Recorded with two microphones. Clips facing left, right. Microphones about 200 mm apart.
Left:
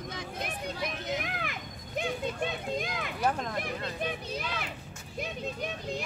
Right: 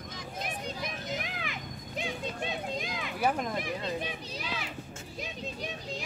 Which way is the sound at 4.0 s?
55° left (ahead or behind).